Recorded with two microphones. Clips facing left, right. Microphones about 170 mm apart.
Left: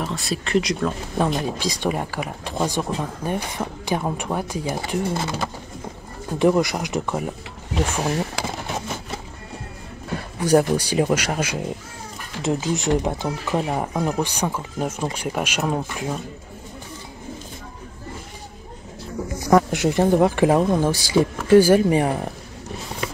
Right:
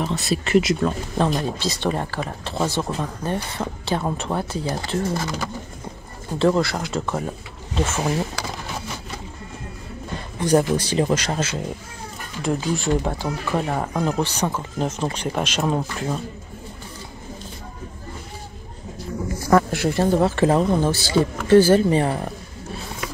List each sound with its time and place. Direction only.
0.0 s speech: centre (ahead or behind)
1.1 s speech: 10° left (ahead or behind)
5.1 s speech: 25° left (ahead or behind)
6.3 s speech: 15° left (ahead or behind)
10.1 s speech: 10° left (ahead or behind)
19.4 s speech: 20° left (ahead or behind)